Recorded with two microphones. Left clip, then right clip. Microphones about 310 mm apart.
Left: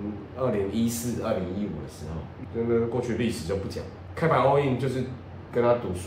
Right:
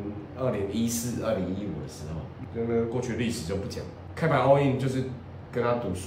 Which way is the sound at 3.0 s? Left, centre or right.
Centre.